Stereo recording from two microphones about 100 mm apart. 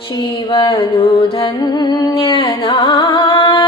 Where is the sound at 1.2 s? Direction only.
50° left (ahead or behind).